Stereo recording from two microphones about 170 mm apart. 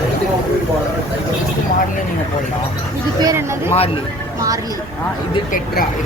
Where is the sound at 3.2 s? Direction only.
15° right (ahead or behind).